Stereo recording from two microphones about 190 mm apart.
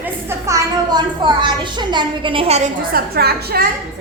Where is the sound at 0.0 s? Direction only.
15° right (ahead or behind); by 2.6 s 30° right (ahead or behind).